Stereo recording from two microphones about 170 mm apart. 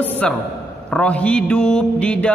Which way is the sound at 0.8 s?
5° left (ahead or behind).